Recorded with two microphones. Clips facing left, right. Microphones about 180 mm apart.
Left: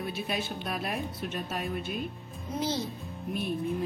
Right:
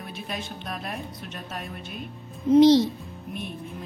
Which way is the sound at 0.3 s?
5° left (ahead or behind).